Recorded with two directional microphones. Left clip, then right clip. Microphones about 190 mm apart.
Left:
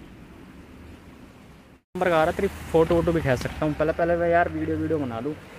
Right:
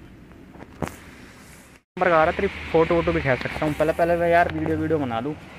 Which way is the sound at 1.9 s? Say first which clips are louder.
Right 3 dB; 15° left (ahead or behind).